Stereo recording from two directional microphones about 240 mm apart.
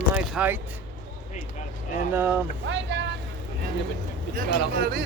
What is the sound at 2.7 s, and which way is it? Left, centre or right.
Speech, right.